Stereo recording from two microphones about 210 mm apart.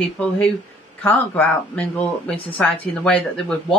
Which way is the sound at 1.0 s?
10° left (ahead or behind).